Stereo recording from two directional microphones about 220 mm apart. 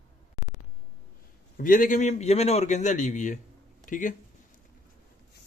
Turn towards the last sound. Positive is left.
turn(degrees=35)  # may be behind; listen again after turning